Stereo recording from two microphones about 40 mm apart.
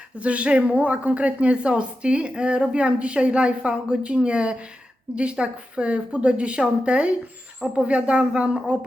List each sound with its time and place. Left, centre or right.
0.2 s a woman's voice: right